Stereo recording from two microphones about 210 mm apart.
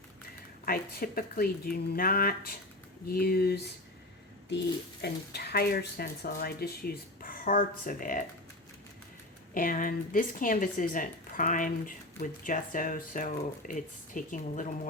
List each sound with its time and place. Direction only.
0.6 s speech: 45° left (ahead or behind)
5.0 s speech: 50° left (ahead or behind)
9.6 s speech: 40° left (ahead or behind)